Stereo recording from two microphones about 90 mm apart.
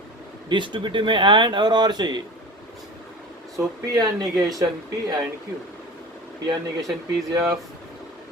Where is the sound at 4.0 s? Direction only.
45° right (ahead or behind).